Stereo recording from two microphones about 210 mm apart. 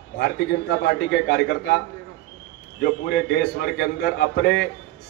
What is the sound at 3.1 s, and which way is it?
A man's voice, 50° left (ahead or behind).